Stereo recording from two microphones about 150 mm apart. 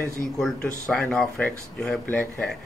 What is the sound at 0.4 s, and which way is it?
Speech, 5° left (ahead or behind).